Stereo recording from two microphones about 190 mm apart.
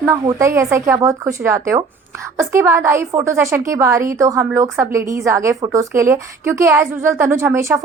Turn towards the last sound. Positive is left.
turn(degrees=-10)  # may be behind; listen again after turning